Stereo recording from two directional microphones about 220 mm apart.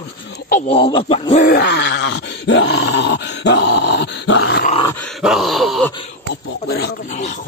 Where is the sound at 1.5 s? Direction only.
50° left (ahead or behind).